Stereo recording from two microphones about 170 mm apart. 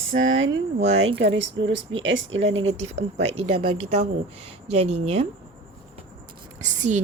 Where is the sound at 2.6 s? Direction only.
40° right (ahead or behind).